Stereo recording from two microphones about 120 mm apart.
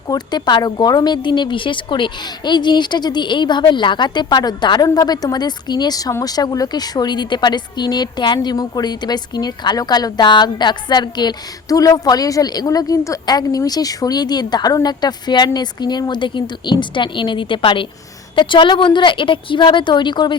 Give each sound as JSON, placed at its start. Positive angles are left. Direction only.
{"t": 0.1, "sound": "speech", "side_deg": 35}